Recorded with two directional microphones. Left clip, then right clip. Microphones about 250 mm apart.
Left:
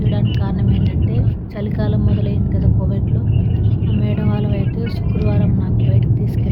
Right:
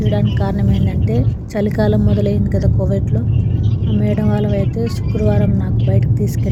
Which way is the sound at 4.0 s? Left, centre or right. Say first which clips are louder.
Right 6 dB; right.